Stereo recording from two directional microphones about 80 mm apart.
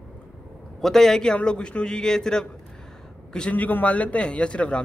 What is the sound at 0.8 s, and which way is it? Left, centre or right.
A man's voice, centre.